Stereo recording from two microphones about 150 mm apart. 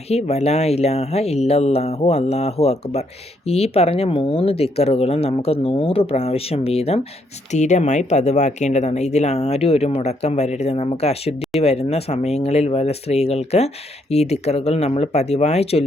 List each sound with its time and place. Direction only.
0.1 s speech: 45° left (ahead or behind)